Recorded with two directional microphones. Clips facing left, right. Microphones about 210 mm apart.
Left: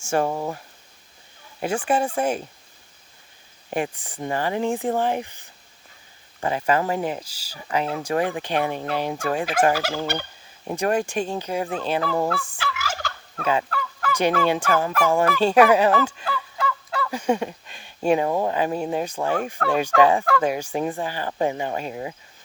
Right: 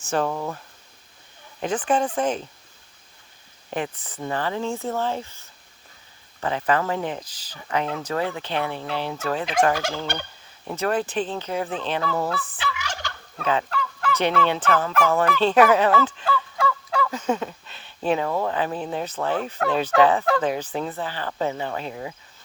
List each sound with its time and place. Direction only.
0.3 s speech: 25° left (ahead or behind)
1.6 s speech: 10° left (ahead or behind)
3.7 s speech: 15° left (ahead or behind)
12.4 s fowl: 10° left (ahead or behind)
17.1 s speech: 10° left (ahead or behind)